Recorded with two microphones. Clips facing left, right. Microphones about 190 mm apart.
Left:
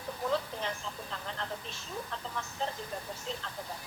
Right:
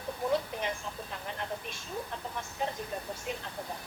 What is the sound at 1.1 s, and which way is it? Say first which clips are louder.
Vehicle: right 2 dB; 15° right (ahead or behind).